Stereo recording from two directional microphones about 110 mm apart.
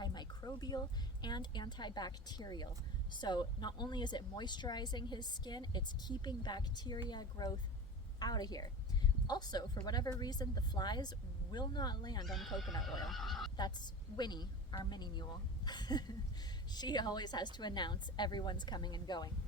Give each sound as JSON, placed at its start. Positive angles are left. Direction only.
{"t": 0.0, "sound": "a sound", "side_deg": 40}
{"t": 1.2, "sound": "speech", "side_deg": 40}
{"t": 12.3, "sound": "speech", "side_deg": 0}
{"t": 13.6, "sound": "speech", "side_deg": 40}